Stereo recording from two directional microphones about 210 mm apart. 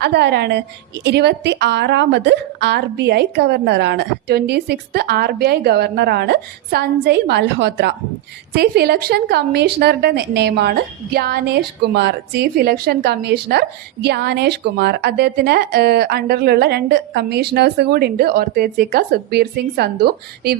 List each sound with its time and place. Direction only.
0.0 s a woman's voice: 50° right (ahead or behind)